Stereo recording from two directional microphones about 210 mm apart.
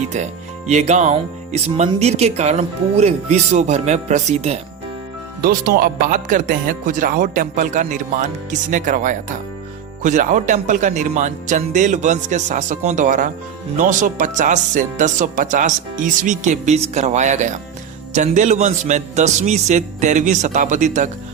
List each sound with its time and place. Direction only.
0.7 s speech: 35° right (ahead or behind)
5.4 s speech: 45° right (ahead or behind)